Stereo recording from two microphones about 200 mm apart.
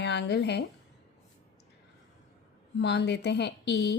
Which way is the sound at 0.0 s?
60° left (ahead or behind).